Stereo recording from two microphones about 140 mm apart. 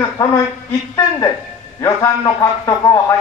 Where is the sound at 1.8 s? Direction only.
20° left (ahead or behind).